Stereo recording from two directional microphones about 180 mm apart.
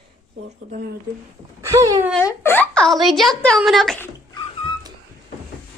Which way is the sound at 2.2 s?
10° left (ahead or behind).